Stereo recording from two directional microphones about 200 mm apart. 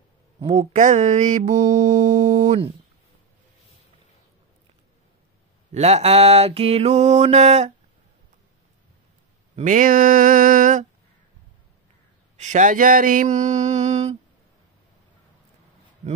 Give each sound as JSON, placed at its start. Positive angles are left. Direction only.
{"t": 0.5, "sound": "mantra", "side_deg": -35}
{"t": 5.7, "sound": "mantra", "side_deg": -30}
{"t": 9.6, "sound": "a sound", "side_deg": -40}
{"t": 12.4, "sound": "mantra", "side_deg": -35}